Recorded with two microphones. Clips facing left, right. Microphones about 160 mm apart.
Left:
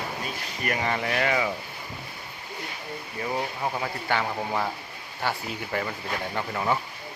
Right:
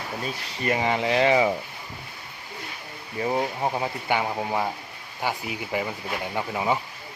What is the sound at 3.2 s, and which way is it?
Speech, 25° right (ahead or behind).